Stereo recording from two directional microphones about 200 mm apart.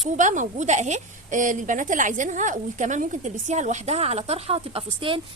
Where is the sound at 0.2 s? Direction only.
40° right (ahead or behind).